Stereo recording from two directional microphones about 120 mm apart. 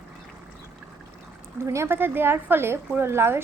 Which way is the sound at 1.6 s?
25° right (ahead or behind).